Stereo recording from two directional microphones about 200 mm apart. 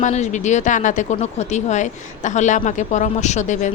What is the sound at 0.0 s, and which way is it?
A woman's voice, 35° left (ahead or behind).